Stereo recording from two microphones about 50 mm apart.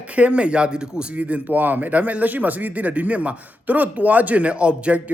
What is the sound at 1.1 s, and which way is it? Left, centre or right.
Speech, right.